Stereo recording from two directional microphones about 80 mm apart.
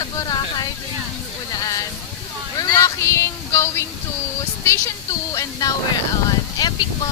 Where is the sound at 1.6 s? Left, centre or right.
Left.